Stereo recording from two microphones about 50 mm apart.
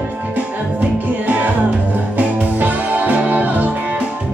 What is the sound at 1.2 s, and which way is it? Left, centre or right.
Music, right.